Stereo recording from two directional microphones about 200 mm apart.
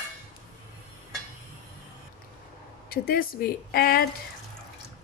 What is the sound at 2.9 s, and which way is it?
Speech, 50° left (ahead or behind).